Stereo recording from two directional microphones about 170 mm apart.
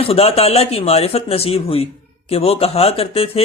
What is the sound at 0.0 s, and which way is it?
Speech, 35° left (ahead or behind).